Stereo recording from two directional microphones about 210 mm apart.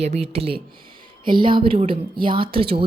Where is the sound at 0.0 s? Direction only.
30° right (ahead or behind).